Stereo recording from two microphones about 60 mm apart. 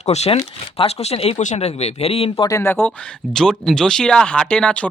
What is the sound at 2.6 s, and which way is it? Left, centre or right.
Speech, left.